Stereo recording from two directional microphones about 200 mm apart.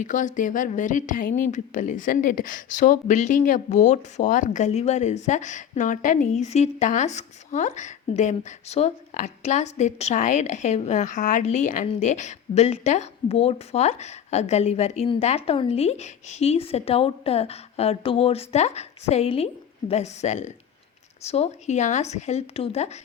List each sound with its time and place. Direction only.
0.0 s speech: 40° left (ahead or behind)